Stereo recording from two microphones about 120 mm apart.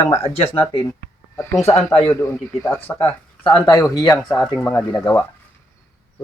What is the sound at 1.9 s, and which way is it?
Speech, 55° left (ahead or behind).